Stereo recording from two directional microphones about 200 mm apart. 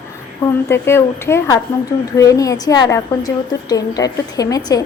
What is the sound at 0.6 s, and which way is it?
A woman's voice, 10° left (ahead or behind).